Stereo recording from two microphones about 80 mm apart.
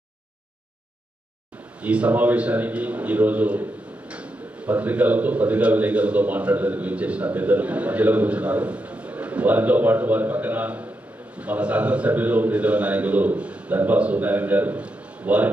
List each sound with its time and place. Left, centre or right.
1.8 s speech: centre